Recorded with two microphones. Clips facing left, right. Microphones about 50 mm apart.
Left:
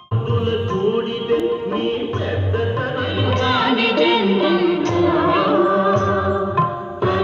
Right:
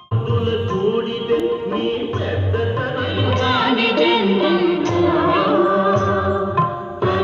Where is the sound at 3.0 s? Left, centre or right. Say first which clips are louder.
Even; right.